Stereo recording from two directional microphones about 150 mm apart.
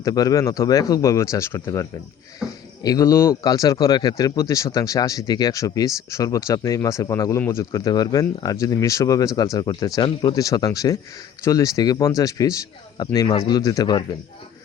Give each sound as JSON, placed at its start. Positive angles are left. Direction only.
{"t": 0.0, "sound": "speech", "side_deg": 25}